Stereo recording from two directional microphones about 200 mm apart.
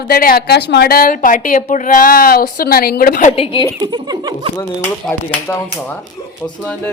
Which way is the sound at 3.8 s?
20° right (ahead or behind).